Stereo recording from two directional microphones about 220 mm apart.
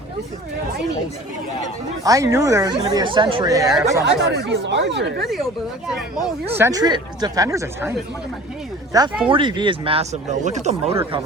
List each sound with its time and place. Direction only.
2.0 s speech: 15° right (ahead or behind)
4.0 s speech: 50° right (ahead or behind)
6.5 s speech: 15° right (ahead or behind)
8.9 s speech: 15° right (ahead or behind)